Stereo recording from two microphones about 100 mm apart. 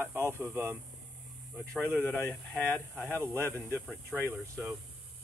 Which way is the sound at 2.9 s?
20° right (ahead or behind).